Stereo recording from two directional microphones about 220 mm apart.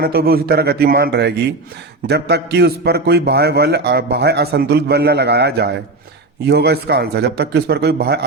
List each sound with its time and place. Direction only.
0.0 s a man's voice: 45° right (ahead or behind)